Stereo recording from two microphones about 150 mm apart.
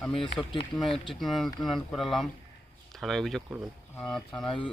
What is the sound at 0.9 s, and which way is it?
Speech, 35° left (ahead or behind).